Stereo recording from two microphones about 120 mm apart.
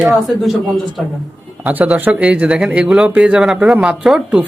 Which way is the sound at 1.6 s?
10° right (ahead or behind).